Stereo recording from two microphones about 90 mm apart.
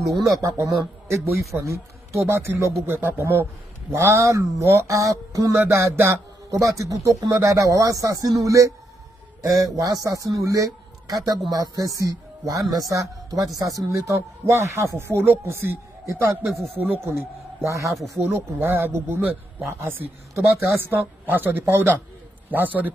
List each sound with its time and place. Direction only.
0.2 s a man's voice: 40° right (ahead or behind)
17.8 s speech: centre (ahead or behind)
18.3 s a woman's voice: 25° right (ahead or behind)